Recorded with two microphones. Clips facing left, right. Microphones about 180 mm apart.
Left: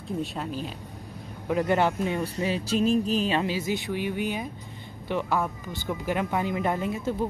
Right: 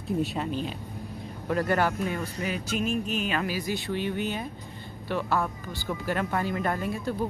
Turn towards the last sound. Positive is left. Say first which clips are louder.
# left 2 dB
turn(degrees=20)  # may be behind; listen again after turning